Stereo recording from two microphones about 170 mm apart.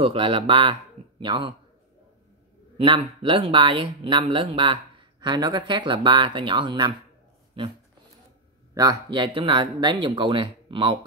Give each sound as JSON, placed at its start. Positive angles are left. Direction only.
{"t": 0.0, "sound": "speech", "side_deg": -30}
{"t": 2.8, "sound": "speech", "side_deg": -30}
{"t": 8.7, "sound": "speech", "side_deg": -20}